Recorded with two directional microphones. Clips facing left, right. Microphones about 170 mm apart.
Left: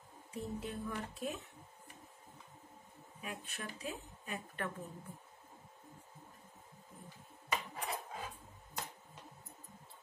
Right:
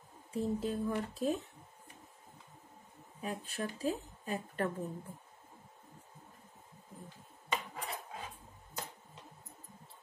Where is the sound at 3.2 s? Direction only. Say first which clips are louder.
Right 7 dB; 35° right (ahead or behind).